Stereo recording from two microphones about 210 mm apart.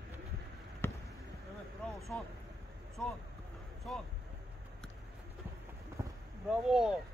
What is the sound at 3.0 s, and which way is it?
Speech, 5° left (ahead or behind).